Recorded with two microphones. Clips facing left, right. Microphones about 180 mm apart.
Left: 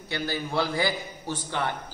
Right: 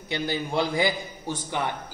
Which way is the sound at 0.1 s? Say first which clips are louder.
Right 2 dB; 20° right (ahead or behind).